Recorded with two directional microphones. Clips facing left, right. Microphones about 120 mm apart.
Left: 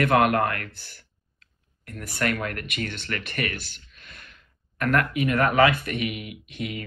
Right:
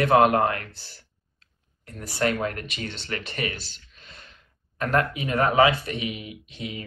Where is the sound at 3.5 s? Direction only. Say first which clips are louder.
Left 3 dB; 60° left (ahead or behind).